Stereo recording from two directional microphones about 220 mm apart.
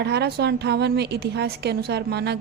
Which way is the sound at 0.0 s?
50° right (ahead or behind).